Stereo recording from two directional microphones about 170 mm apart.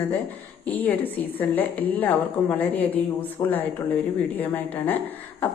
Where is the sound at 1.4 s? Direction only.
10° left (ahead or behind).